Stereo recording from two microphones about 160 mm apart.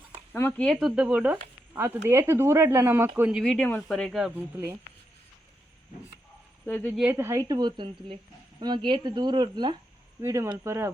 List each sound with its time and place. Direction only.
0.3 s speech: 10° left (ahead or behind); by 3.4 s 10° right (ahead or behind)
3.4 s speech: 5° left (ahead or behind)
4.4 s speech: 15° right (ahead or behind)
6.7 s speech: 5° left (ahead or behind)
7.0 s a woman's voice: 15° right (ahead or behind)